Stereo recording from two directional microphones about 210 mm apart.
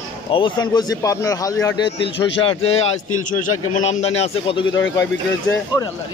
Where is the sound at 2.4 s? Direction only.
30° left (ahead or behind).